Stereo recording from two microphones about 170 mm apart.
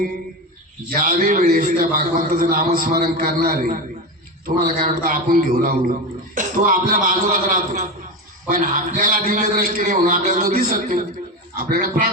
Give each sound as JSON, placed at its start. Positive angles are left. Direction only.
{"t": 0.9, "sound": "a man's voice", "side_deg": -55}